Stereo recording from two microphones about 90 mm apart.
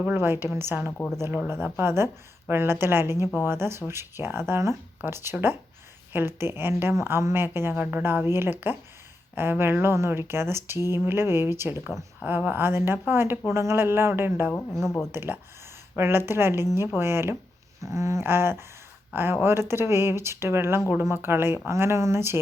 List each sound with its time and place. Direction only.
0.0 s a woman's voice: 25° right (ahead or behind)
14.7 s speech: 5° left (ahead or behind)
15.1 s a woman's voice: 25° right (ahead or behind)